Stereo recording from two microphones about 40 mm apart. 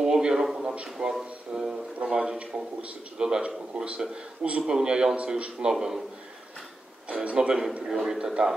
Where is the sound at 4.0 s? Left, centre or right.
Centre.